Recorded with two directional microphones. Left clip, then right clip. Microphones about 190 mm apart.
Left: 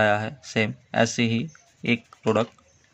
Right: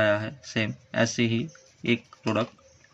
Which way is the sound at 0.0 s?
30° left (ahead or behind).